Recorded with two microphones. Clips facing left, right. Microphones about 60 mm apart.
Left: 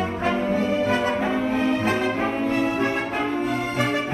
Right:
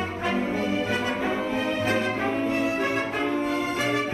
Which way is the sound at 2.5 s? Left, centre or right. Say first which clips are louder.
Left 3 dB; left.